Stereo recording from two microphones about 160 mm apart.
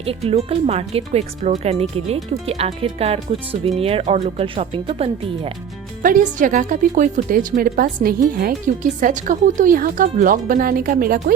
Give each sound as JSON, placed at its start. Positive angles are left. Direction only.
{"t": 0.0, "sound": "speech", "side_deg": -35}
{"t": 6.0, "sound": "speech", "side_deg": -55}